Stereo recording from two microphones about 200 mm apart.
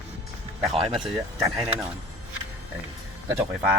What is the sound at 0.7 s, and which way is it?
Speech, 30° right (ahead or behind).